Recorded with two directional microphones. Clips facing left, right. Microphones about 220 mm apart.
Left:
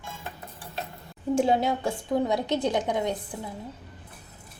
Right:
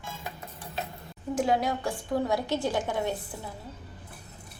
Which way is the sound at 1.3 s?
25° left (ahead or behind).